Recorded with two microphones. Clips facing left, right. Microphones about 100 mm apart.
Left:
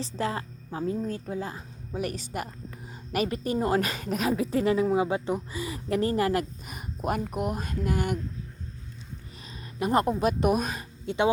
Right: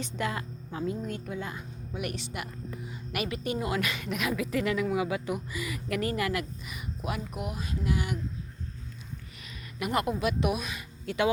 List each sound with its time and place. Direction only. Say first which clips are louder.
0.2 s a woman's voice: left 3 dB; 35° left (ahead or behind); by 8.2 s 50° left (ahead or behind)
9.7 s a woman's voice: left 5 dB; 35° left (ahead or behind)
11.0 s speech: left 2 dB; 25° left (ahead or behind)